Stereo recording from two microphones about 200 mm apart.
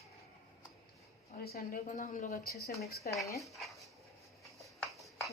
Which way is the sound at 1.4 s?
50° left (ahead or behind).